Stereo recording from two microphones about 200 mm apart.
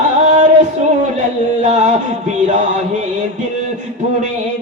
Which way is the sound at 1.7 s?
35° right (ahead or behind).